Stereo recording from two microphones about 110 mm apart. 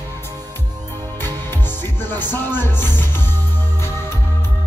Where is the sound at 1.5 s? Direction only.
20° left (ahead or behind).